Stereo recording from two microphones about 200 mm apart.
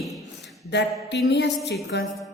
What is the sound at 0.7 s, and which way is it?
Mantra, 60° left (ahead or behind).